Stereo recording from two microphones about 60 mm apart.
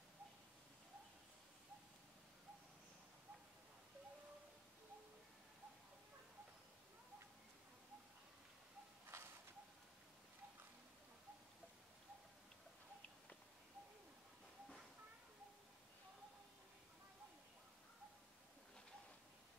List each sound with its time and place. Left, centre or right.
9.1 s bird: right